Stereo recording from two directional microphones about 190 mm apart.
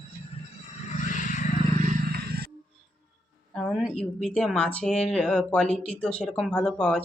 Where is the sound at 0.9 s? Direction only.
40° left (ahead or behind).